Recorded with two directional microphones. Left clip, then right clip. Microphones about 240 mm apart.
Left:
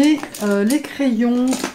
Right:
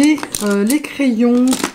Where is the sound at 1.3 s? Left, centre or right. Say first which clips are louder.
Right 5 dB; right.